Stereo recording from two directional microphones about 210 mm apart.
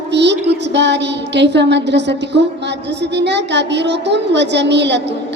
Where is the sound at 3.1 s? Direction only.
55° right (ahead or behind).